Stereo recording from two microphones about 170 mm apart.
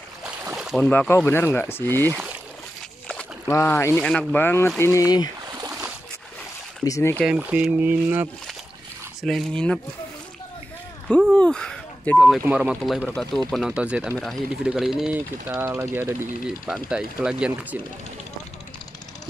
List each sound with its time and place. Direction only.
0.2 s boat: 5° right (ahead or behind)
0.8 s speech: 10° left (ahead or behind)
3.1 s a sound: 10° left (ahead or behind)
3.9 s speech: 5° left (ahead or behind); by 5.3 s 20° left (ahead or behind)
5.5 s boat: 20° right (ahead or behind)
6.8 s speech: 15° left (ahead or behind)
7.2 s speech: 5° right (ahead or behind)
9.2 s speech: 5° left (ahead or behind)
11.1 s speech: 5° left (ahead or behind)